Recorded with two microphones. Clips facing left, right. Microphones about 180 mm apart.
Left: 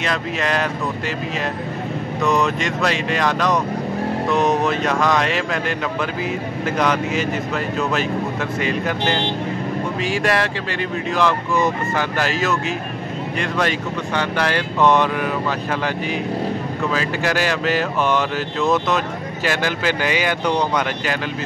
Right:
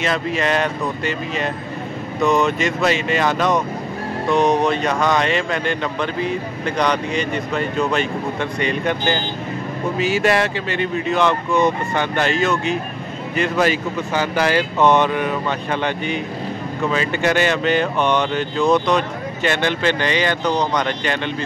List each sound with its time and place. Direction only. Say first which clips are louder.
0.0 s speech: right 2 dB; centre (ahead or behind)